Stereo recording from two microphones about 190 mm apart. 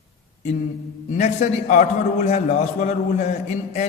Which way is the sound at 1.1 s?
40° left (ahead or behind).